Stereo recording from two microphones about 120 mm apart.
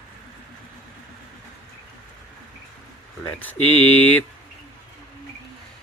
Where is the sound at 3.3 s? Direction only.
15° left (ahead or behind).